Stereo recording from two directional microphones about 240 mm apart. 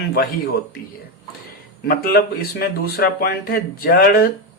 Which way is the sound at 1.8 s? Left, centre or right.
Left.